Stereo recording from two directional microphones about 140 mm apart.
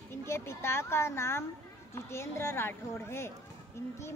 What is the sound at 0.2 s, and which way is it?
Speech, 20° left (ahead or behind).